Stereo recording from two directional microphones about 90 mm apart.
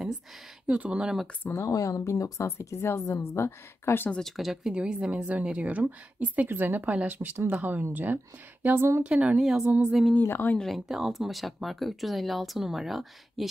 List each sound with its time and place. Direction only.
0.7 s speech: 10° right (ahead or behind)
1.5 s a woman's voice: 35° left (ahead or behind)
4.4 s speech: 5° right (ahead or behind); by 9.0 s 25° right (ahead or behind)
9.0 s speech: 15° right (ahead or behind)
9.4 s speech: 5° right (ahead or behind)
10.1 s speech: 20° left (ahead or behind)
10.6 s speech: centre (ahead or behind)